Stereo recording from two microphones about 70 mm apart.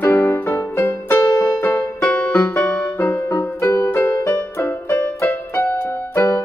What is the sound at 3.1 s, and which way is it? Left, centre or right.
Music, left.